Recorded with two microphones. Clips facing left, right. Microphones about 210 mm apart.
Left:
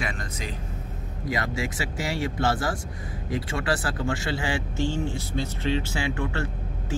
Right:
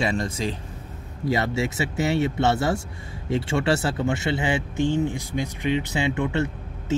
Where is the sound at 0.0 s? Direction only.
30° right (ahead or behind).